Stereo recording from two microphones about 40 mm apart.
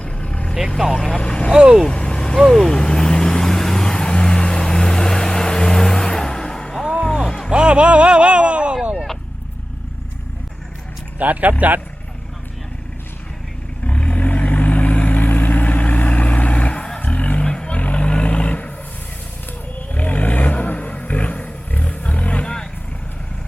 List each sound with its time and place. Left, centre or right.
0.0 s vehicle: left
1.1 s speech: left
1.9 s vehicle: left
2.4 s vehicle: centre
7.0 s music: centre
7.5 s a sound: right
11.2 s speech: right
13.8 s vehicle: left
17.0 s music: left
17.4 s vehicle: left
19.9 s vehicle: left